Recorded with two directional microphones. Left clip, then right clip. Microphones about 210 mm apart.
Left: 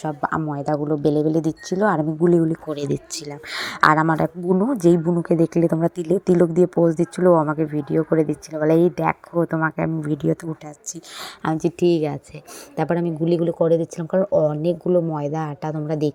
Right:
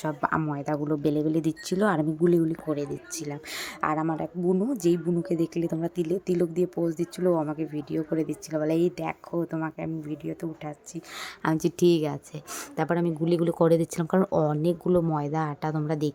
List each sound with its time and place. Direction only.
0.0 s speech: 10° left (ahead or behind)
2.6 s speech: 30° left (ahead or behind)
3.5 s speech: 5° left (ahead or behind)
11.2 s speech: 10° left (ahead or behind)